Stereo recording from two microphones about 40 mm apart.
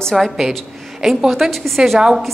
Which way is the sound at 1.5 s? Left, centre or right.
Centre.